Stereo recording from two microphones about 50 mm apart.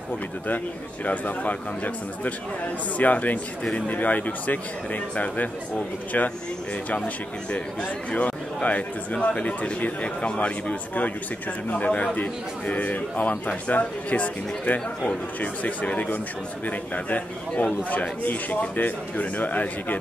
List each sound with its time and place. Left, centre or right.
1.0 s a man's voice: left
8.1 s a man's voice: left